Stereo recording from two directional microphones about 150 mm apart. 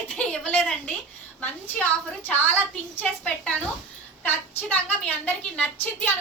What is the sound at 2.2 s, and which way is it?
A woman's voice, 10° left (ahead or behind).